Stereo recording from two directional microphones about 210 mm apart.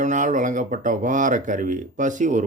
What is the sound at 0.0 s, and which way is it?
A man's voice, 35° right (ahead or behind).